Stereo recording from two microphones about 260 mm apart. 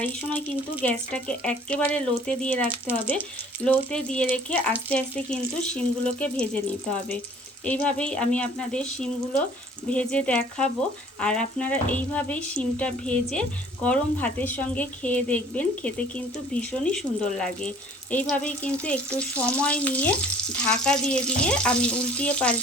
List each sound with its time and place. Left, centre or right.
0.0 s frying: centre
7.6 s frying: centre